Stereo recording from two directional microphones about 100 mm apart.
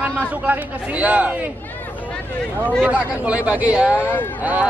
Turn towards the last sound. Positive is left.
turn(degrees=-15)  # may be behind; listen again after turning